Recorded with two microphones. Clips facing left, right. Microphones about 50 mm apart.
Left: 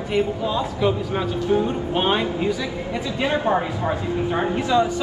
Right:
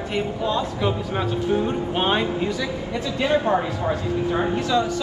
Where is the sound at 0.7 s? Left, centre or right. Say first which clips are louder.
Left 2 dB; centre.